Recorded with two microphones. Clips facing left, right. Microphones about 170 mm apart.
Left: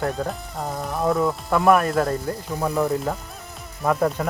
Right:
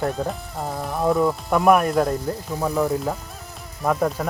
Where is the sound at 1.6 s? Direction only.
10° right (ahead or behind).